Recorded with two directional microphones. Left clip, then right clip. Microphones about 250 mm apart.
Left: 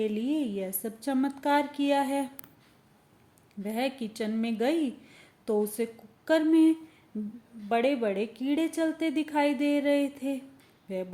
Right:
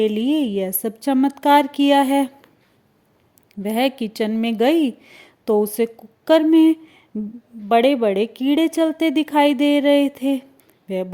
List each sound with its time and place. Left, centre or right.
0.0 s a woman's voice: right
3.5 s a woman's voice: right